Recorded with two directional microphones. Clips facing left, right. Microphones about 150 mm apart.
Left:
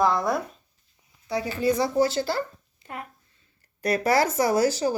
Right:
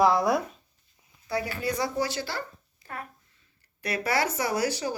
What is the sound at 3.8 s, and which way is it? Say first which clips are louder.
Speech: left 6 dB; 45° left (ahead or behind).